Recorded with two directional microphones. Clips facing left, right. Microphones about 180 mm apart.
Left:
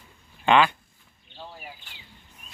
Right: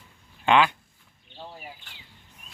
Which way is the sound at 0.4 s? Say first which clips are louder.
Left 1 dB; 10° right (ahead or behind).